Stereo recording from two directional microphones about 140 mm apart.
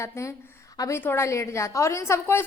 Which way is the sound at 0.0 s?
20° left (ahead or behind).